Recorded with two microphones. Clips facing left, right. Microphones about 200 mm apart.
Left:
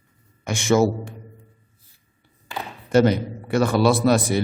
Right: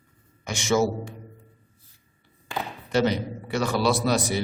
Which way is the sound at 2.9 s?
50° left (ahead or behind).